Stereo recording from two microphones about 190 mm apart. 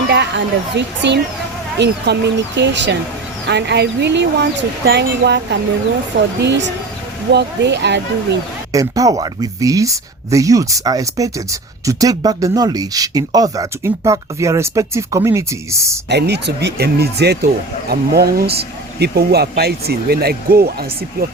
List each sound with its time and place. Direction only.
0.1 s speech: 65° right (ahead or behind)
8.7 s speech: 20° right (ahead or behind)
16.0 s speech: 60° right (ahead or behind)